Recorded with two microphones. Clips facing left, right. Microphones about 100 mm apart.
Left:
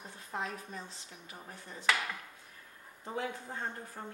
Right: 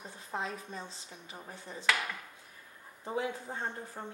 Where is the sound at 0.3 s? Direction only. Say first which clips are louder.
Right 1 dB; 20° right (ahead or behind).